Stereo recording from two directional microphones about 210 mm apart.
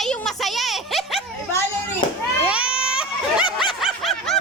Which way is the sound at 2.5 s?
5° right (ahead or behind).